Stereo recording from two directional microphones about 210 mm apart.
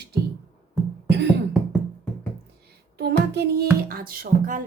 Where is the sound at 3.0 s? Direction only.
50° right (ahead or behind).